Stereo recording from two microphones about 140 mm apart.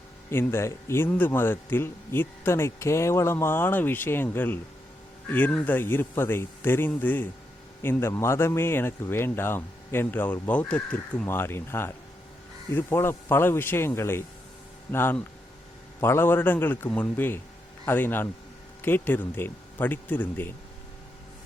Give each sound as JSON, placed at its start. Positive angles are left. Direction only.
{"t": 0.3, "sound": "a man's voice", "side_deg": 15}